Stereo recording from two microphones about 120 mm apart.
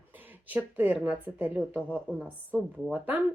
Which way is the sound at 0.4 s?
15° right (ahead or behind).